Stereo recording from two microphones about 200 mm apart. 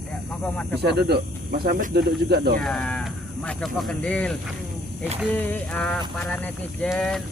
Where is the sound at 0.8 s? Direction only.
55° right (ahead or behind).